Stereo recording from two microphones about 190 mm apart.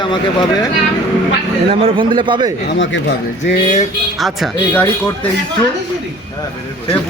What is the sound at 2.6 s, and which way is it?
Speech, 80° left.